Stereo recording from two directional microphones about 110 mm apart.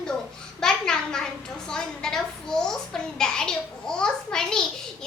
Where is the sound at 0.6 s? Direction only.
5° left (ahead or behind).